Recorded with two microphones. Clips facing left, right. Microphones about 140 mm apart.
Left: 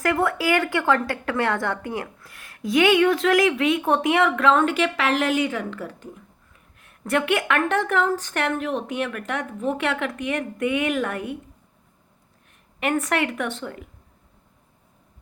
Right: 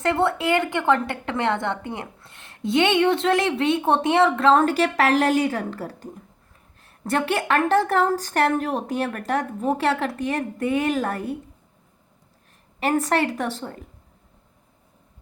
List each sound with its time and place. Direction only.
0.0 s a woman's voice: 30° right (ahead or behind)
12.8 s a woman's voice: 30° right (ahead or behind)